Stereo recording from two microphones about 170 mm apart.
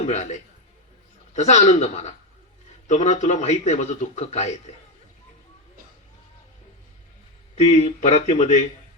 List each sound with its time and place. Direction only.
0.0 s a man's voice: 45° left (ahead or behind)
7.5 s speech: 40° left (ahead or behind)